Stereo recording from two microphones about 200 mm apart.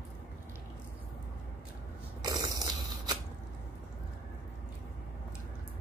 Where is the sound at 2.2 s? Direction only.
20° right (ahead or behind).